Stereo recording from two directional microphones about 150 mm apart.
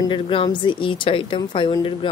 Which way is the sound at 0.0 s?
35° left (ahead or behind).